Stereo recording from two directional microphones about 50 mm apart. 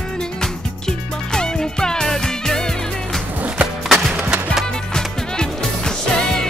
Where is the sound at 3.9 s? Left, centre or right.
Centre.